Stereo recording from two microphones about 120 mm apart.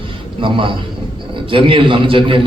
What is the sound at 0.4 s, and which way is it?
A man's voice, 45° right (ahead or behind).